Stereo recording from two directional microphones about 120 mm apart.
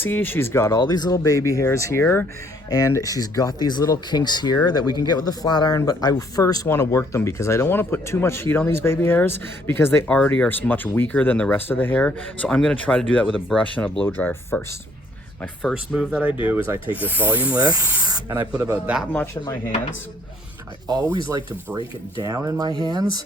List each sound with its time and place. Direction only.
0.0 s speech: 15° left (ahead or behind)
0.8 s speech: 35° left (ahead or behind); by 13.2 s 10° left (ahead or behind)
13.2 s speech: centre (ahead or behind)
15.9 s speech: 5° right (ahead or behind)
17.6 s speech: 35° right (ahead or behind)
19.1 s speech: 20° left (ahead or behind)
21.3 s speech: 25° right (ahead or behind)